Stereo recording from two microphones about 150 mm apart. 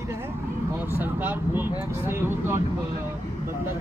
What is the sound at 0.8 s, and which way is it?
Speech, 15° right (ahead or behind).